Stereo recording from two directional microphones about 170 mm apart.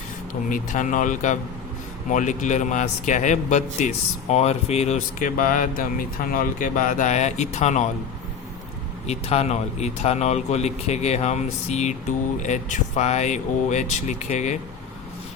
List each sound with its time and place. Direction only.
0.5 s a man's voice: 50° left (ahead or behind)
9.0 s a man's voice: 40° left (ahead or behind)